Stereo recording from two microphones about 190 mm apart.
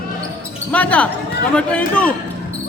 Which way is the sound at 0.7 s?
5° left (ahead or behind).